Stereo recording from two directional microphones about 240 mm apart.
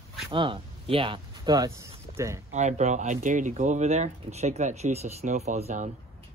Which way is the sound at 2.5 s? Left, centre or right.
Right.